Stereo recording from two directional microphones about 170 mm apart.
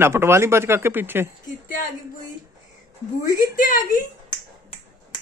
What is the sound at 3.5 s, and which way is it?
Speech, 50° left (ahead or behind).